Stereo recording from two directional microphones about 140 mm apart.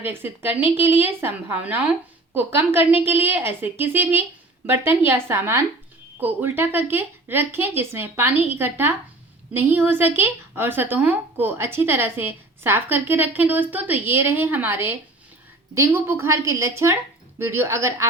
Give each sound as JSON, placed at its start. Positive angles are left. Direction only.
{"t": 0.1, "sound": "a woman's voice", "side_deg": -15}